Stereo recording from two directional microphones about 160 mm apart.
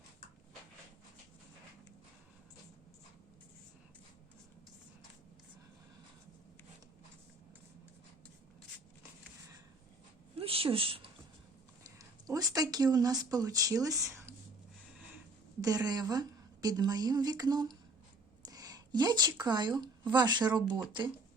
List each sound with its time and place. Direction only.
10.3 s a sound: 35° right (ahead or behind)
11.9 s speech: 20° right (ahead or behind)
15.6 s a woman's voice: 25° right (ahead or behind)